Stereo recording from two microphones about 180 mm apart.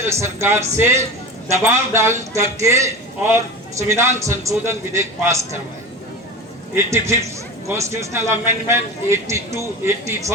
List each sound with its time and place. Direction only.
0.0 s a man's voice: 15° right (ahead or behind)
6.7 s a man's voice: 15° right (ahead or behind)